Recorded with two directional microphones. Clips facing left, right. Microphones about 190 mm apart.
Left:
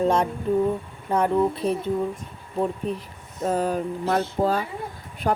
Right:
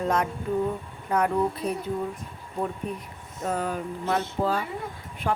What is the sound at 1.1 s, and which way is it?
Speech, 30° left (ahead or behind).